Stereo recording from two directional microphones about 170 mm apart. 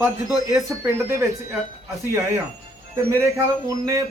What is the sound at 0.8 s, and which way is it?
Speech, 15° right (ahead or behind).